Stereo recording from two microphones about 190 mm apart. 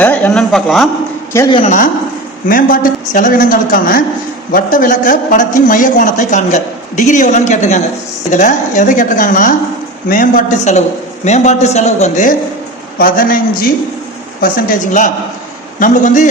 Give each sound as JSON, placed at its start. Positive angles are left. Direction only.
{"t": 0.0, "sound": "a man's voice", "side_deg": 10}
{"t": 1.5, "sound": "a man's voice", "side_deg": 25}
{"t": 2.5, "sound": "a woman's voice", "side_deg": 45}